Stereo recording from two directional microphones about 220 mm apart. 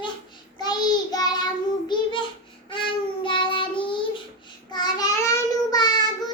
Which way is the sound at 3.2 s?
20° left (ahead or behind).